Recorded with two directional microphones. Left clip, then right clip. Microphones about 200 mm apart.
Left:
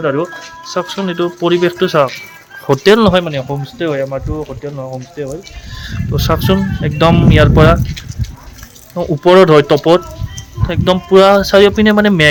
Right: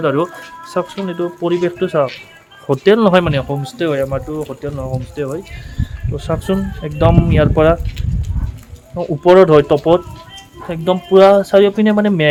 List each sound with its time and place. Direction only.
0.0 s speech: 15° right (ahead or behind)
0.9 s speech: 5° left (ahead or behind)
3.1 s speech: 25° right (ahead or behind)
3.5 s speech: 5° right (ahead or behind)
6.1 s speech: 15° left (ahead or behind)
9.0 s speech: 15° left (ahead or behind)